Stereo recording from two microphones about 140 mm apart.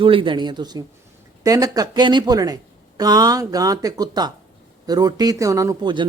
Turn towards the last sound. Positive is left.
turn(degrees=-30)  # may be behind; listen again after turning